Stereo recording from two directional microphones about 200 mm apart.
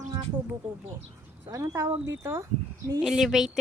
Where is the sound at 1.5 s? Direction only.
15° right (ahead or behind).